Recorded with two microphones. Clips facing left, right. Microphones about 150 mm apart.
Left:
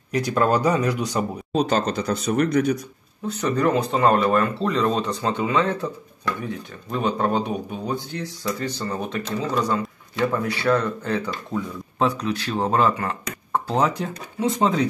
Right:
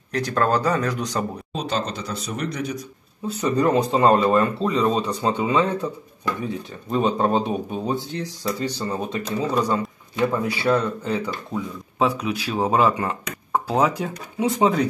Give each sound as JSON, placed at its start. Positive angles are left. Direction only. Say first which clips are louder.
{"t": 0.1, "sound": "speech", "louder": "left 1 dB", "side_deg": 10}
{"t": 1.5, "sound": "speech", "louder": "left 8 dB", "side_deg": 45}
{"t": 3.3, "sound": "speech", "louder": "right 2 dB", "side_deg": -15}
{"t": 12.0, "sound": "speech", "louder": "even", "side_deg": -10}